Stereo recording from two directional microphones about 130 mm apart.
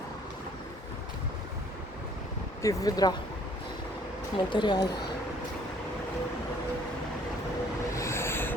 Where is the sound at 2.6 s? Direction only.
25° left (ahead or behind).